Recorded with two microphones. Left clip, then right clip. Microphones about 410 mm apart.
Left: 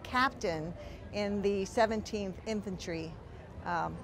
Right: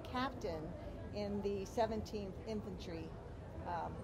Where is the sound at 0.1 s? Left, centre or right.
Left.